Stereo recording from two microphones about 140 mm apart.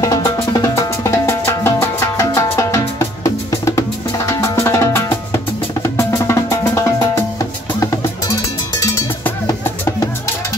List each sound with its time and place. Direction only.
0.0 s music: 25° left (ahead or behind)
4.3 s drum: 20° left (ahead or behind)
5.8 s music: 20° left (ahead or behind)
8.7 s cowbell: 20° left (ahead or behind)